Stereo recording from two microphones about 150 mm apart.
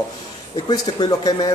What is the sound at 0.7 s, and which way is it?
Speech, 30° left (ahead or behind).